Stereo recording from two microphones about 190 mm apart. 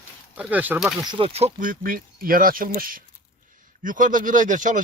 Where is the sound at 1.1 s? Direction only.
30° right (ahead or behind).